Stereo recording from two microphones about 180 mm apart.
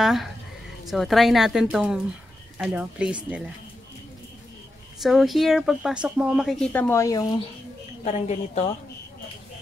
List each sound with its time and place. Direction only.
0.0 s speech: centre (ahead or behind)
5.0 s speech: centre (ahead or behind); by 7.3 s 20° left (ahead or behind)
8.0 s a woman's voice: 40° left (ahead or behind)